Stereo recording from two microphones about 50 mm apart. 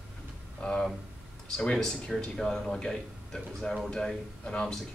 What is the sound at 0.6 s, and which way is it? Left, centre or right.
Speech, centre.